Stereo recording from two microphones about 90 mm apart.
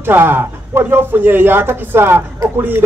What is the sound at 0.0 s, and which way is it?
Speech, 25° right (ahead or behind).